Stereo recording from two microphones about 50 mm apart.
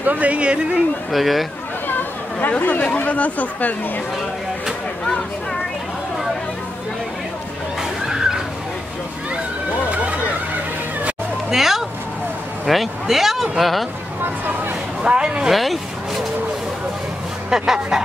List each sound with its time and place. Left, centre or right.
0.0 s speech: right
1.1 s speech: centre
2.5 s speech: left
11.5 s speech: centre
15.0 s speech: centre
15.5 s a sound: centre
17.5 s speech: centre